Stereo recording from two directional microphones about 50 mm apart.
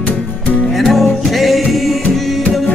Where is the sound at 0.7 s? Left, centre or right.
Centre.